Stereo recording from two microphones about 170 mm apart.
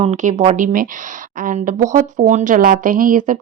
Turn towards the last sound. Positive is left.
turn(degrees=-55)  # may be behind; listen again after turning